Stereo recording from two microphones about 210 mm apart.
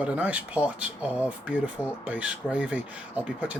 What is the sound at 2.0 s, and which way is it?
Speech, 5° right (ahead or behind).